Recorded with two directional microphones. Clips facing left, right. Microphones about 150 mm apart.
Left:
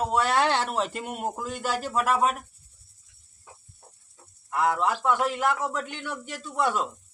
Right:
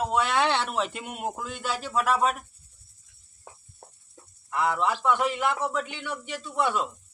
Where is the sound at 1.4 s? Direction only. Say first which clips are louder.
Left 3 dB; 45° left (ahead or behind).